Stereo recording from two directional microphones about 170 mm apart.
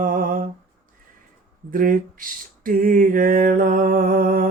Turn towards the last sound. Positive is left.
turn(degrees=-55)  # may be behind; listen again after turning